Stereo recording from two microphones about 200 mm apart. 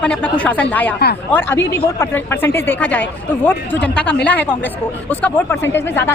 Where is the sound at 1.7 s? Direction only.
10° left (ahead or behind).